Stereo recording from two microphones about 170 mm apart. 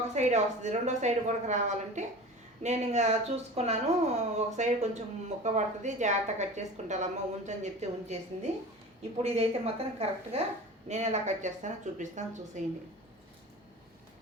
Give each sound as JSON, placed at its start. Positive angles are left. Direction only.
{"t": 0.0, "sound": "a woman's voice", "side_deg": -45}